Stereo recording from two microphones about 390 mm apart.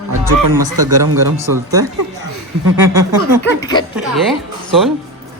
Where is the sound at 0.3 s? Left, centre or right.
Right.